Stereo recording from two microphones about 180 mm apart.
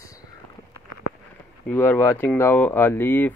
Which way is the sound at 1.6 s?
10° left (ahead or behind).